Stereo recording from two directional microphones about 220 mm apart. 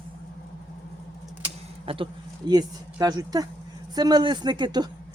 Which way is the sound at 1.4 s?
25° right (ahead or behind).